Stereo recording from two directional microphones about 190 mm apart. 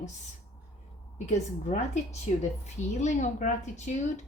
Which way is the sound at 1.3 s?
35° left (ahead or behind).